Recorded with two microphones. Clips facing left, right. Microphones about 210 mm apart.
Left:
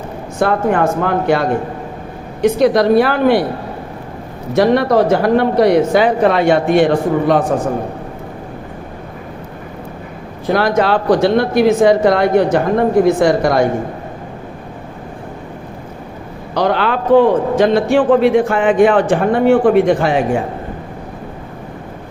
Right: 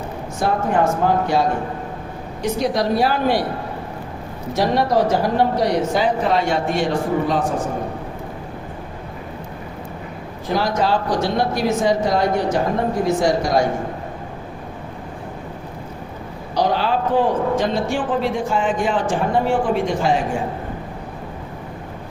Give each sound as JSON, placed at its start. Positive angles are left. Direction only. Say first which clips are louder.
{"t": 0.3, "sound": "a man's voice", "louder": "left 5 dB", "side_deg": 65}
{"t": 4.5, "sound": "a man's voice", "louder": "left 6 dB", "side_deg": 60}
{"t": 10.5, "sound": "a man's voice", "louder": "left 5 dB", "side_deg": 65}
{"t": 16.6, "sound": "a man's voice", "louder": "left 3 dB", "side_deg": 65}